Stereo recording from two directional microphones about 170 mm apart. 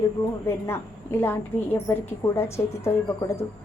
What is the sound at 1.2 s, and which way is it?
A woman's voice, 10° left (ahead or behind).